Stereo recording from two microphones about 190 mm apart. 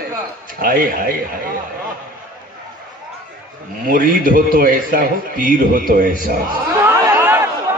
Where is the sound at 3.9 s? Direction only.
50° right (ahead or behind).